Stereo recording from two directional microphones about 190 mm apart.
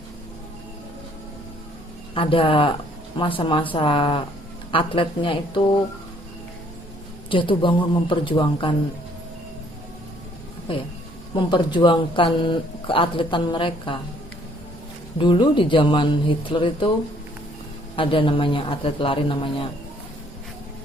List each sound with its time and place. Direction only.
2.1 s speech: 30° left (ahead or behind)
7.3 s speech: 25° left (ahead or behind)
10.7 s speech: 25° left (ahead or behind)
15.2 s speech: 25° left (ahead or behind)
17.9 s speech: 25° left (ahead or behind)